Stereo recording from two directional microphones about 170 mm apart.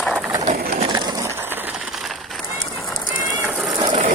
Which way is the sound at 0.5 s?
60° right (ahead or behind).